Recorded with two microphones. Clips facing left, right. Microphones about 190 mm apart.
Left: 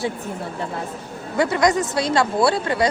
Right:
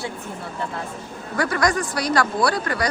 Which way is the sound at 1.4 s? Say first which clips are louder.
Left 3 dB; 20° left (ahead or behind).